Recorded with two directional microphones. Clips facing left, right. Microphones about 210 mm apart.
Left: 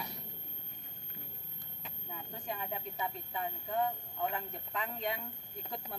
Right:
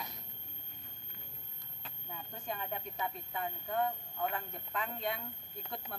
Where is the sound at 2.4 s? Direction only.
10° left (ahead or behind).